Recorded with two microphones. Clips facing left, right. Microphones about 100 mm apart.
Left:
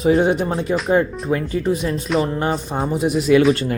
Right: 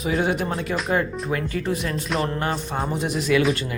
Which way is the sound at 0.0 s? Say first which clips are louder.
Left 7 dB; 30° left (ahead or behind).